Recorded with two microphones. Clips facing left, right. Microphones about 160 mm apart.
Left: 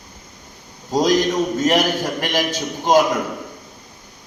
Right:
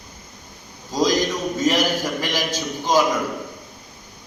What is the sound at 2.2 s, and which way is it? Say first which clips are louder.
Speech: left 3 dB; 60° left (ahead or behind).